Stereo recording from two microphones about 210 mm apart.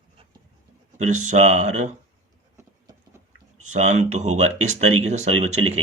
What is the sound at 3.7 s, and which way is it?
Speech, 35° right (ahead or behind).